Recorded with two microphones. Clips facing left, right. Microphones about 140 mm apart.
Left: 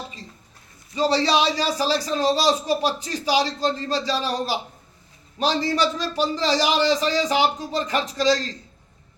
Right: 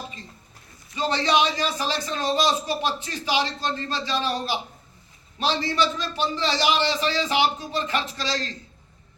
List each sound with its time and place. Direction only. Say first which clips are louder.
0.9 s speech: left 2 dB; 35° left (ahead or behind)